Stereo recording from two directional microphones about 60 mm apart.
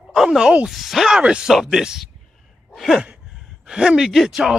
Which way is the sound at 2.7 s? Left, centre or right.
Centre.